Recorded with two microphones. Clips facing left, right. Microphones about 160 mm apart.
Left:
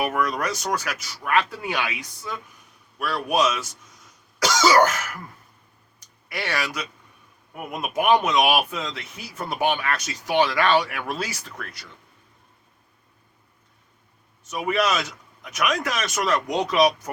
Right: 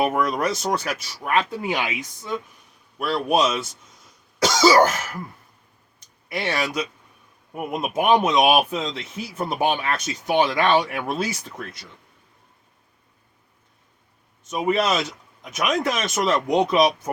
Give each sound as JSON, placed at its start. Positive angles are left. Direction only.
{"t": 0.0, "sound": "speech", "side_deg": -25}
{"t": 6.0, "sound": "a sound", "side_deg": -25}
{"t": 7.5, "sound": "speech", "side_deg": -25}
{"t": 14.5, "sound": "speech", "side_deg": -25}